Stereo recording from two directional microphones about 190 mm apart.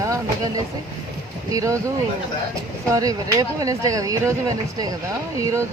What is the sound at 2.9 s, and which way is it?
Speech, 20° right (ahead or behind).